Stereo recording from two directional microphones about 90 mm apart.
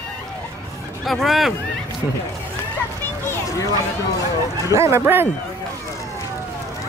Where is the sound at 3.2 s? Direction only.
40° left (ahead or behind).